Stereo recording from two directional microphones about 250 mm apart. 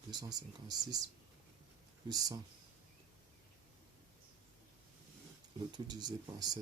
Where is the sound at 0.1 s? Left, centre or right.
Centre.